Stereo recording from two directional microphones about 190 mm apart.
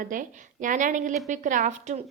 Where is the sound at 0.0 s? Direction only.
45° right (ahead or behind).